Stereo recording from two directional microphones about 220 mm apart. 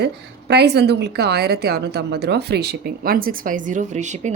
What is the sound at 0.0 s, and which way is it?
A woman's voice, 50° right (ahead or behind).